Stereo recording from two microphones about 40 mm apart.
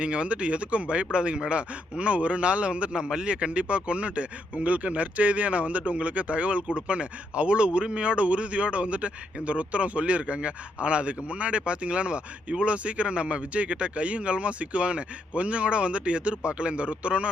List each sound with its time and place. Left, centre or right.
0.0 s speech: right
2.9 s a man's voice: centre